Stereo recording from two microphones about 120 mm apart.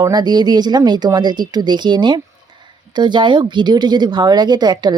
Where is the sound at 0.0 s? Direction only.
35° right (ahead or behind).